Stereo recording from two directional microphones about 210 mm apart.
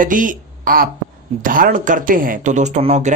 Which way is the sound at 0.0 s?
40° right (ahead or behind).